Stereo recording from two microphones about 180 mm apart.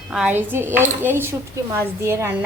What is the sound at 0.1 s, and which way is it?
Speech, 5° right (ahead or behind).